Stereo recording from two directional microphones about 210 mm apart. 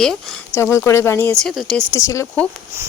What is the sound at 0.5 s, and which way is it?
Speech, 10° left (ahead or behind).